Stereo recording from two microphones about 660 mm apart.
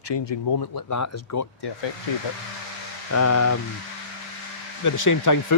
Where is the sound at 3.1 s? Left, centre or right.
Left.